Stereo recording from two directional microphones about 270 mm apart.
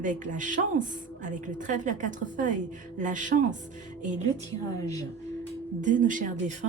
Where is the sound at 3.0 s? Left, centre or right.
Right.